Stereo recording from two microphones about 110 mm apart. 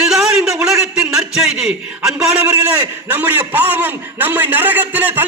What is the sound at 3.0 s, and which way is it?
A man's voice, 15° right (ahead or behind).